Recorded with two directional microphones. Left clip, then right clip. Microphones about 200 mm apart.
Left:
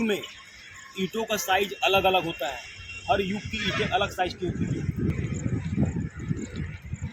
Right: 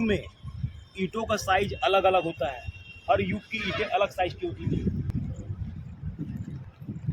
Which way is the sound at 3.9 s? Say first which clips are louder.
Right 3 dB; centre (ahead or behind).